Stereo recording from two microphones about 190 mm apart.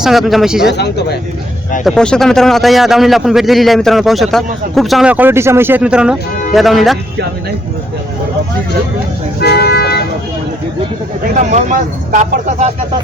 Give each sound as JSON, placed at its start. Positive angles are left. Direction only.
{"t": 0.0, "sound": "a man's voice", "side_deg": 0}
{"t": 0.7, "sound": "speech", "side_deg": 60}
{"t": 1.8, "sound": "a man's voice", "side_deg": 5}
{"t": 9.4, "sound": "speech", "side_deg": 55}
{"t": 11.3, "sound": "speech", "side_deg": -40}